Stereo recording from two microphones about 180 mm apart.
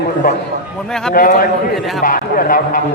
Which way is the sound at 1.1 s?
50° left (ahead or behind).